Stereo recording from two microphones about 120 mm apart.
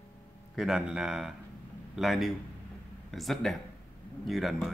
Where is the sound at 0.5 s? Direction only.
5° right (ahead or behind).